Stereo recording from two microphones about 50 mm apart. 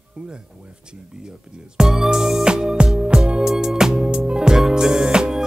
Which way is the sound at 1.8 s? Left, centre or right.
Centre.